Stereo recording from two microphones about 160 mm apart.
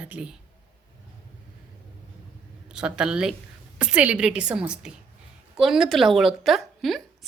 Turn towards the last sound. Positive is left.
turn(degrees=0)  # may be behind; listen again after turning